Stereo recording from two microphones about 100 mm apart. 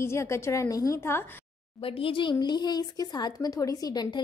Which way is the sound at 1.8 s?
65° left (ahead or behind).